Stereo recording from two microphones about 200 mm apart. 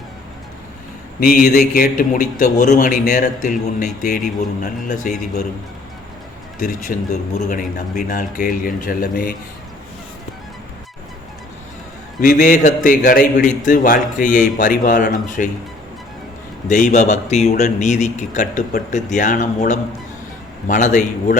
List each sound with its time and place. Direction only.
1.2 s a man's voice: 45° left (ahead or behind)
6.6 s speech: 40° left (ahead or behind)
12.2 s a man's voice: 40° left (ahead or behind)
16.6 s a man's voice: 40° left (ahead or behind)